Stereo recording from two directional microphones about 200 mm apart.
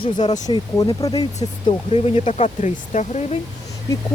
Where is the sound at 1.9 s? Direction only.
30° left (ahead or behind).